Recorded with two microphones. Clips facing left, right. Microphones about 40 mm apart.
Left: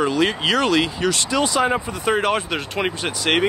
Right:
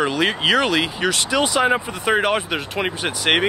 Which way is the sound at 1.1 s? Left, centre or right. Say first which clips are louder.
Right 1 dB; right.